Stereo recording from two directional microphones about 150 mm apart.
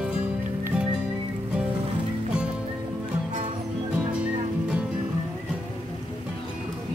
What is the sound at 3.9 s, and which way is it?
Music, 5° right (ahead or behind).